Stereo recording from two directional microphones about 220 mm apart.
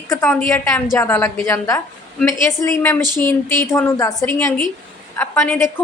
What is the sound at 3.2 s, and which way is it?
A woman's voice, 10° left (ahead or behind).